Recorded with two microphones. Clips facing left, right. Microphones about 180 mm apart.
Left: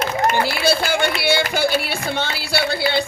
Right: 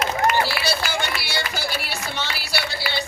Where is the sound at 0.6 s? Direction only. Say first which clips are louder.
Left 7 dB; 55° left (ahead or behind).